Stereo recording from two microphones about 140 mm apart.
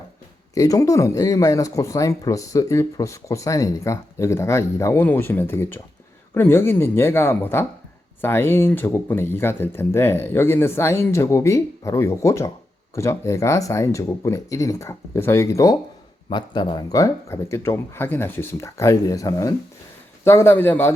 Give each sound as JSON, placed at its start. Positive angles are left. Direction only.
{"t": 0.5, "sound": "speech", "side_deg": 25}